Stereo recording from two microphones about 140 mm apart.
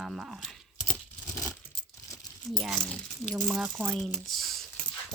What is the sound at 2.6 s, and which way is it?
Speech, centre (ahead or behind).